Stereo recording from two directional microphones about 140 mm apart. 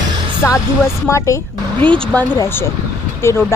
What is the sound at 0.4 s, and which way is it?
Speech, 20° left (ahead or behind).